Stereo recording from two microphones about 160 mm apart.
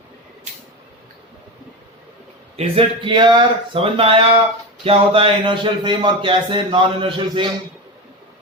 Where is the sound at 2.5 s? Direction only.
40° right (ahead or behind).